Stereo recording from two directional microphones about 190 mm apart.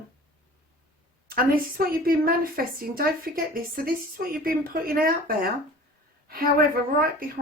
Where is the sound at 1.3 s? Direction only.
50° right (ahead or behind).